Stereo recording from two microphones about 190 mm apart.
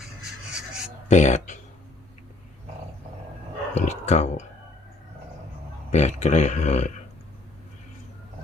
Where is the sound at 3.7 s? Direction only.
35° left (ahead or behind).